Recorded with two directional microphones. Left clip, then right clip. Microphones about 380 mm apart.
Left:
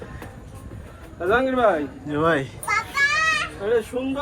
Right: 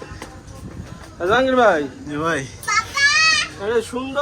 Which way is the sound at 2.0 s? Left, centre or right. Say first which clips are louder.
Left 4 dB; centre.